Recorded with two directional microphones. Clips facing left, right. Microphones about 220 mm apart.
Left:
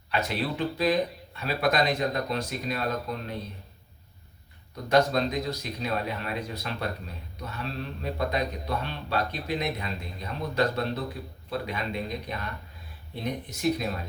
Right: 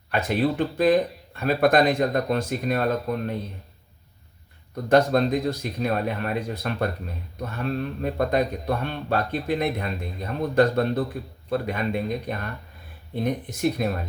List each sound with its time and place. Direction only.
0.1 s speech: 50° right (ahead or behind)
4.9 s speech: 50° right (ahead or behind)